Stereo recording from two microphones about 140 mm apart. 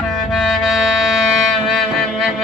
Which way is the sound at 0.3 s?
Centre (ahead or behind).